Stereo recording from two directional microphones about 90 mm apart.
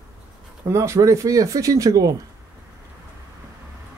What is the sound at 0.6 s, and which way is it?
Speech, 35° right (ahead or behind).